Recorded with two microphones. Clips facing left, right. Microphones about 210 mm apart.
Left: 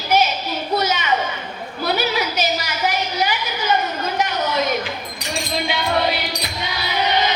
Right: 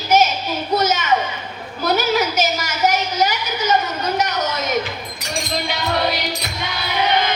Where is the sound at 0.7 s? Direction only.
45° right (ahead or behind).